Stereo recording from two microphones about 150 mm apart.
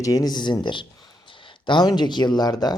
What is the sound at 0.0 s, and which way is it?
Speech, 25° left (ahead or behind).